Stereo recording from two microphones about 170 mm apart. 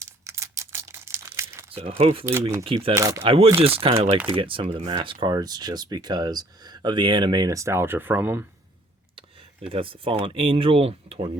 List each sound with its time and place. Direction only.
0.0 s crumpling: 15° right (ahead or behind)
1.7 s speech: 35° right (ahead or behind)
2.9 s speech: 20° right (ahead or behind)
3.2 s speech: 35° right (ahead or behind); by 8.4 s 10° right (ahead or behind)
9.1 s speech: 35° right (ahead or behind)